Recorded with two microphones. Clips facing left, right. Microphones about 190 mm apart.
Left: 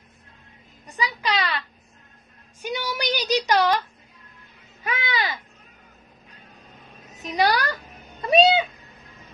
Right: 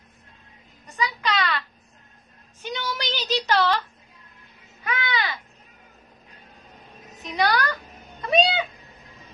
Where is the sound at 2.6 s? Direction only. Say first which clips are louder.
Left 2 dB; 10° left (ahead or behind).